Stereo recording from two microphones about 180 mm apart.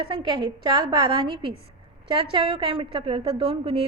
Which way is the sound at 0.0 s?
30° right (ahead or behind).